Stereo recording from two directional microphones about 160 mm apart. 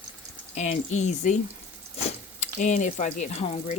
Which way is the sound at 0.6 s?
45° left (ahead or behind).